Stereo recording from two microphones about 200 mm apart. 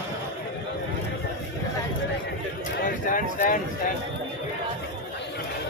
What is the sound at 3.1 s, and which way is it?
Speech, 45° left (ahead or behind).